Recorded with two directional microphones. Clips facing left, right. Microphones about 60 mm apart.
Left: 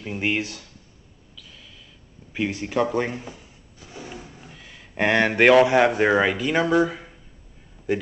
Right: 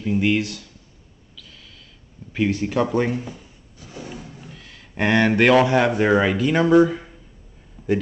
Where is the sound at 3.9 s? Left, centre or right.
Centre.